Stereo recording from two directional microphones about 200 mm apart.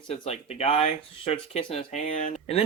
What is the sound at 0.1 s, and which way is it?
Speech, 30° left (ahead or behind).